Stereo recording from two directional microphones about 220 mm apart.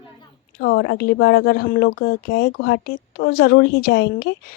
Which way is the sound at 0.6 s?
50° left (ahead or behind).